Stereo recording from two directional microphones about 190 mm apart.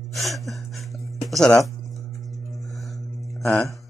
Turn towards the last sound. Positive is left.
turn(degrees=0)  # may be behind; listen again after turning